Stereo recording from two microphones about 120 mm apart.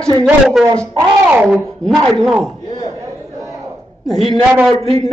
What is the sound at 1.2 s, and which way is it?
Speech, 15° right (ahead or behind).